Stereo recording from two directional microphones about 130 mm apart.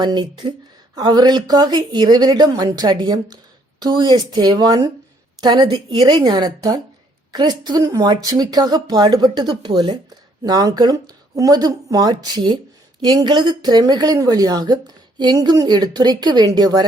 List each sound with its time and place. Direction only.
0.0 s speech: 35° right (ahead or behind)